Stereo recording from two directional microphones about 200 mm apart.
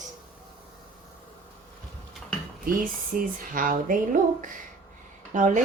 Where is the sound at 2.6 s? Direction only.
45° right (ahead or behind).